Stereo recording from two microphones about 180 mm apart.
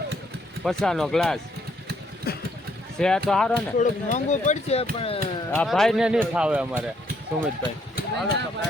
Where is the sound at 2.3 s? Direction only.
60° left (ahead or behind).